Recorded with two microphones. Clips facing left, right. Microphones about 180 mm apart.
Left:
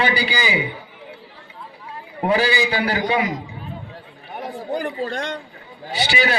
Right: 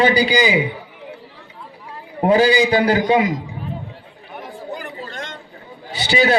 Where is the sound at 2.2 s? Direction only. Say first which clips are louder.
Right 5 dB; 40° right (ahead or behind).